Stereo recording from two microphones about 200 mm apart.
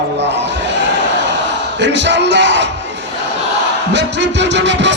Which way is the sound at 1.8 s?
60° right (ahead or behind).